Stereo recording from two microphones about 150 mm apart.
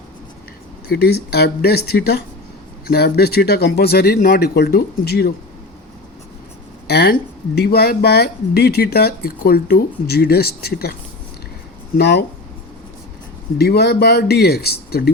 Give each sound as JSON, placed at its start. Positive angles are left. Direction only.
{"t": 0.9, "sound": "speech", "side_deg": 90}
{"t": 6.8, "sound": "speech", "side_deg": 90}
{"t": 11.9, "sound": "speech", "side_deg": 90}
{"t": 13.6, "sound": "speech", "side_deg": 90}